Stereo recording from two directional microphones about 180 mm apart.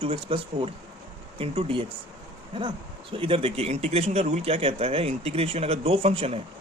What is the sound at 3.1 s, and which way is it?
Speech, 30° right (ahead or behind).